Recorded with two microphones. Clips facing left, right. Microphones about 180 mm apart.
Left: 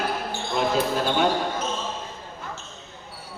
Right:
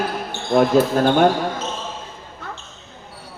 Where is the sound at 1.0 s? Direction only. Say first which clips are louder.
Right 7 dB; 55° right (ahead or behind).